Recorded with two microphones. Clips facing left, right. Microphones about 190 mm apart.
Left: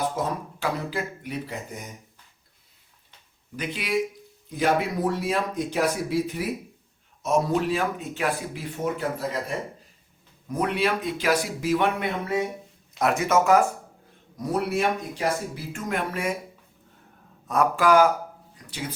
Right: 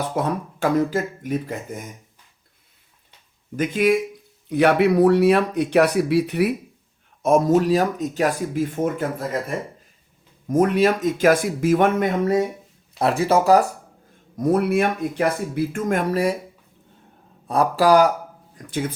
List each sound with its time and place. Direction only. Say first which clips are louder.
0.2 s speech: right 5 dB; 45° right (ahead or behind)
3.5 s speech: right 13 dB; 45° right (ahead or behind)
4.4 s speech: right 7 dB; 70° right (ahead or behind)
7.2 s speech: right 7 dB; 50° right (ahead or behind)
10.5 s speech: right 8 dB; 45° right (ahead or behind)
14.3 s speech: right 7 dB; 50° right (ahead or behind)
17.5 s speech: right 4 dB; 35° right (ahead or behind)
18.5 s speech: right 9 dB; 50° right (ahead or behind)